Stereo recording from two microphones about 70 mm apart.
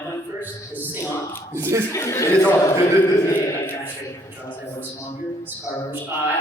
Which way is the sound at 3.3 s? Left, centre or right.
Left.